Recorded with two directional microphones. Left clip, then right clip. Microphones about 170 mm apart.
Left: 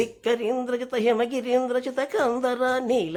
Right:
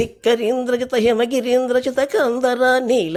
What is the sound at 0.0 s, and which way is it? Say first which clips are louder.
A woman's voice: right 7 dB; 25° right (ahead or behind).